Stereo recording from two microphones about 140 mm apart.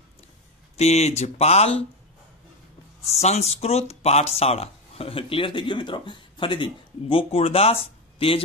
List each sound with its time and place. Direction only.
0.7 s speech: 50° left (ahead or behind)
3.1 s speech: 50° left (ahead or behind)